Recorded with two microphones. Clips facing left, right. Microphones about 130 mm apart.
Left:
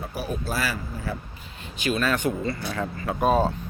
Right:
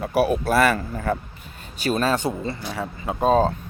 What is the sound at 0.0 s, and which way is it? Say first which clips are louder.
Speech: right 10 dB; 70° right (ahead or behind).